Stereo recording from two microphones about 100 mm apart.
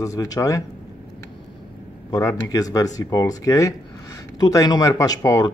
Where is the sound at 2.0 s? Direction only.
40° left (ahead or behind).